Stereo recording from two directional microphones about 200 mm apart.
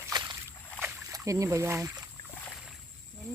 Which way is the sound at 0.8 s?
5° right (ahead or behind).